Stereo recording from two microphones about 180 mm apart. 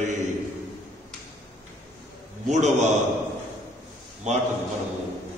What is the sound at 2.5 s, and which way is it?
Speech, 40° right (ahead or behind).